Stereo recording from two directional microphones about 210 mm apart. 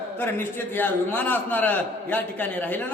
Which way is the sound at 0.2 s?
10° left (ahead or behind).